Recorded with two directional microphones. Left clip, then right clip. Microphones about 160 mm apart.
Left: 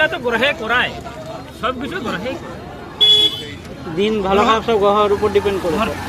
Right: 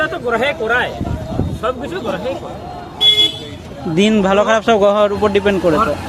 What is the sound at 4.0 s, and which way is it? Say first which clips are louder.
A man's voice: right 2 dB; 90° right.